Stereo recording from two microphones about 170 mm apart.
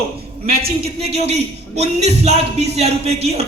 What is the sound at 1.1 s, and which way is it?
Music, 40° right (ahead or behind).